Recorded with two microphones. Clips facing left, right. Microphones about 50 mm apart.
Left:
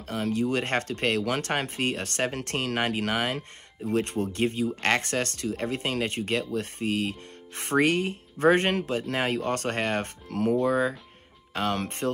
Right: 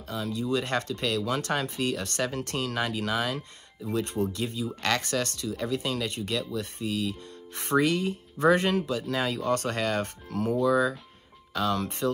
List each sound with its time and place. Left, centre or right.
0.0 s speech: left